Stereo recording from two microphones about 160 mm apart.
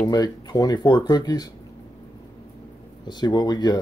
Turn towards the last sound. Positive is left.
turn(degrees=25)  # may be behind; listen again after turning